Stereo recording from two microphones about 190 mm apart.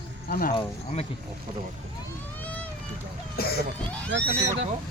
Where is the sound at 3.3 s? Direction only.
55° left (ahead or behind).